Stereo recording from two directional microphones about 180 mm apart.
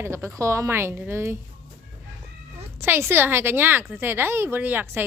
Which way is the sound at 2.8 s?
10° right (ahead or behind).